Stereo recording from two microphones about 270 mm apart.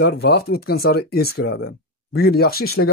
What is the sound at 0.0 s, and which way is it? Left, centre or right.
A man's voice, left.